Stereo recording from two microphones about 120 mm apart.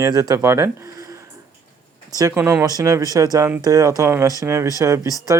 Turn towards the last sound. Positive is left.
turn(degrees=30)  # may be behind; listen again after turning